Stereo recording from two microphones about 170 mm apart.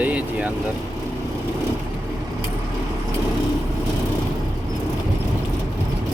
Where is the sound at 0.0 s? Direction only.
10° right (ahead or behind).